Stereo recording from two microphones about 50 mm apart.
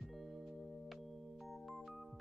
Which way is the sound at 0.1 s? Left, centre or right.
Centre.